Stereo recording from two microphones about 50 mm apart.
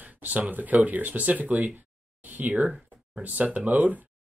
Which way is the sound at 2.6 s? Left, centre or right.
Centre.